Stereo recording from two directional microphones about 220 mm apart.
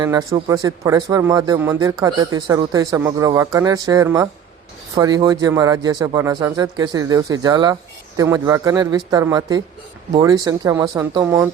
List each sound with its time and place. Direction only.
0.0 s speech: 15° right (ahead or behind)